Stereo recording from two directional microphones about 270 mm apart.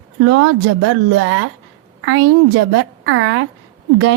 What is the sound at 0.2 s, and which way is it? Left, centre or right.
A woman's voice, right.